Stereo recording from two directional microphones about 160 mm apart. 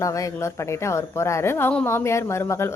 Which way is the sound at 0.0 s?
20° left (ahead or behind).